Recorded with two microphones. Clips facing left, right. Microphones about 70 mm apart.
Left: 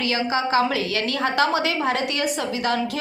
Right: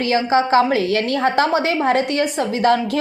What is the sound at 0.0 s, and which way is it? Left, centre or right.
A woman's voice, right.